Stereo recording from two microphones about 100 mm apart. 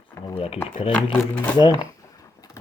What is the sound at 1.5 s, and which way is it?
Speech, 45° left (ahead or behind).